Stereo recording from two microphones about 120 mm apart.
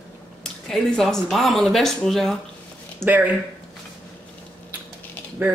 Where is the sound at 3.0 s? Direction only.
15° right (ahead or behind).